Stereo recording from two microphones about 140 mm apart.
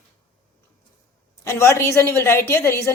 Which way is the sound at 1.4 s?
20° left (ahead or behind).